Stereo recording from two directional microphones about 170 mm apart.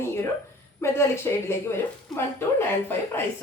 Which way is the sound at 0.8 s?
15° left (ahead or behind).